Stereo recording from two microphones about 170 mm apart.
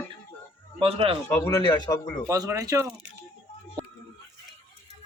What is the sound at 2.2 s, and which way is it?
Speech, 20° right (ahead or behind).